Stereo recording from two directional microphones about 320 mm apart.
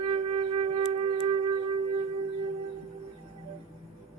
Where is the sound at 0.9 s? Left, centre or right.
Centre.